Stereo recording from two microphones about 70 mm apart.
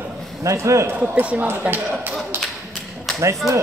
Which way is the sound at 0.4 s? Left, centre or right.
Right.